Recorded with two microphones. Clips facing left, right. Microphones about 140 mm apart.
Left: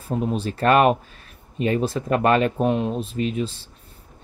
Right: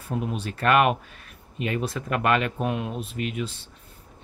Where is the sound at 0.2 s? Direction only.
35° left (ahead or behind).